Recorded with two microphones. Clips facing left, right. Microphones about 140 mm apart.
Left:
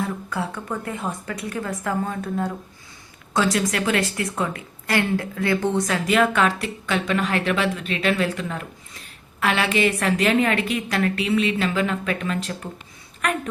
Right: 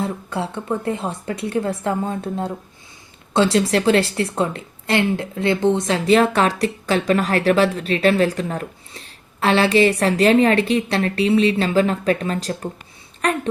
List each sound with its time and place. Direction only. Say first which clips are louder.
0.0 s a woman's voice: right 2 dB; 25° right (ahead or behind)